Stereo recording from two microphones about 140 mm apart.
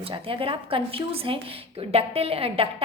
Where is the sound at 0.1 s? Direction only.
40° right (ahead or behind).